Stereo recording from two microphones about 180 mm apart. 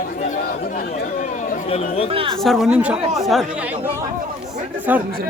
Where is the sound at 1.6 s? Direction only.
35° left (ahead or behind).